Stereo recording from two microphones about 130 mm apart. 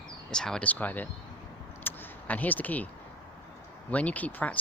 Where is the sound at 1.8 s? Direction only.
15° left (ahead or behind).